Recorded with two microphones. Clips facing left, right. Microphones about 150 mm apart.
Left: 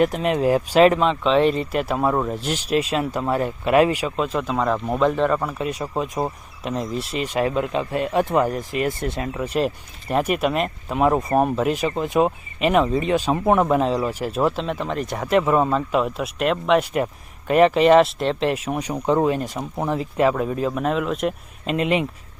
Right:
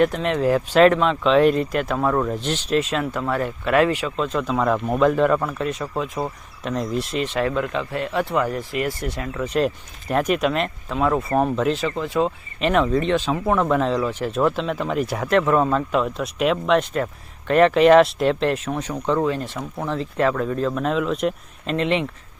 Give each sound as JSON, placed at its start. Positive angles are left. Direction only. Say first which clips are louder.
{"t": 0.0, "sound": "speech", "louder": "even", "side_deg": 10}
{"t": 5.8, "sound": "speech", "louder": "left 1 dB", "side_deg": 20}
{"t": 6.7, "sound": "speech", "louder": "right 1 dB", "side_deg": 0}
{"t": 7.3, "sound": "speech", "louder": "left 3 dB", "side_deg": 20}
{"t": 9.4, "sound": "speech", "louder": "right 2 dB", "side_deg": 5}
{"t": 10.9, "sound": "speech", "louder": "left 2 dB", "side_deg": 15}
{"t": 12.5, "sound": "speech", "louder": "even", "side_deg": 5}